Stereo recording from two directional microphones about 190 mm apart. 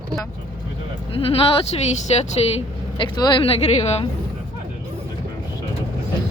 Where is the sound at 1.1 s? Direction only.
30° left (ahead or behind).